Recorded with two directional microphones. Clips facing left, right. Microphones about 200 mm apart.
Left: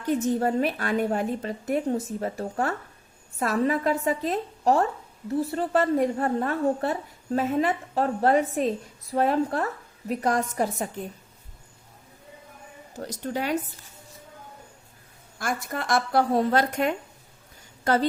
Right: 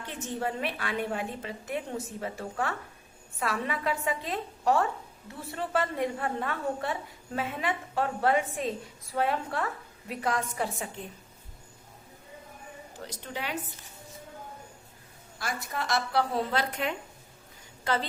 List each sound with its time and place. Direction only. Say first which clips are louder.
0.0 s a woman's voice: left 10 dB; 40° left (ahead or behind)
13.0 s speech: left 9 dB; 45° left (ahead or behind)
15.4 s speech: left 4 dB; 50° left (ahead or behind)